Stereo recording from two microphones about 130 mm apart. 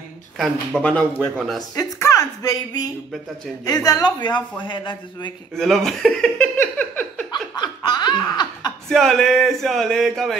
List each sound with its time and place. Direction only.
0.4 s speech: 5° left (ahead or behind)
1.8 s a woman's voice: 25° left (ahead or behind)
5.6 s speech: centre (ahead or behind)
7.5 s laughter: 35° left (ahead or behind)
8.8 s speech: centre (ahead or behind)